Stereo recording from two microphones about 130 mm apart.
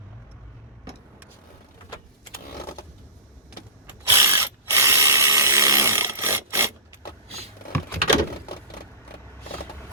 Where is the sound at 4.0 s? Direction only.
20° right (ahead or behind).